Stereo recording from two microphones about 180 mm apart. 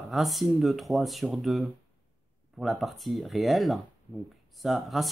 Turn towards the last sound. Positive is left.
turn(degrees=0)  # may be behind; listen again after turning